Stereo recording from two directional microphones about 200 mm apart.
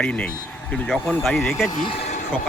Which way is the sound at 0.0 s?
5° left (ahead or behind).